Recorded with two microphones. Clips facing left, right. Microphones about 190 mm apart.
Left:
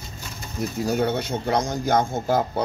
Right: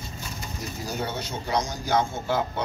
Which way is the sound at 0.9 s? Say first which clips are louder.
Left 8 dB; 55° left (ahead or behind).